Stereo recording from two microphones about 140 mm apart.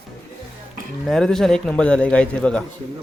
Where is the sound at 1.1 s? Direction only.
5° left (ahead or behind).